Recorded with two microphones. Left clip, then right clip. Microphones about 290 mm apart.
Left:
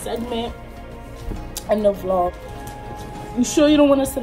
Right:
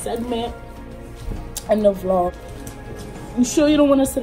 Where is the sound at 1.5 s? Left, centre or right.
Centre.